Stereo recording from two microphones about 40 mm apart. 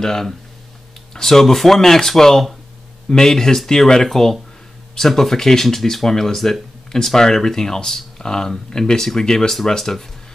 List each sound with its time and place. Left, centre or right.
0.0 s speech: centre